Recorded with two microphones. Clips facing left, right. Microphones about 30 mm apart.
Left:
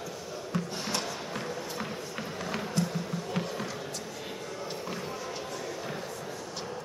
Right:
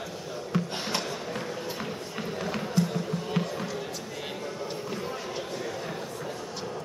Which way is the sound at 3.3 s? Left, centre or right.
Centre.